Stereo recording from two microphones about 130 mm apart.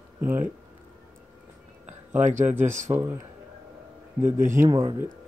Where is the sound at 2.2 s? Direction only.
70° right (ahead or behind).